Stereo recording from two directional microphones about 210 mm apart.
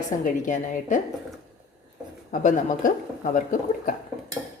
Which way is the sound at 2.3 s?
35° left (ahead or behind).